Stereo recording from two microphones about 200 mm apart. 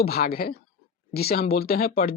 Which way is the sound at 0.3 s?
50° left (ahead or behind).